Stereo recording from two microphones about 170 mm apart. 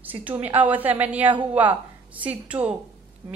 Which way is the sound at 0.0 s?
10° right (ahead or behind).